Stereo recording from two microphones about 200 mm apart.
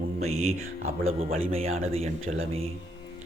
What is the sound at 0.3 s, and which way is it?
Speech, 35° right (ahead or behind).